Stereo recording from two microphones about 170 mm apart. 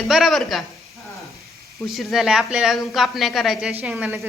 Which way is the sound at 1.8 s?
Centre (ahead or behind).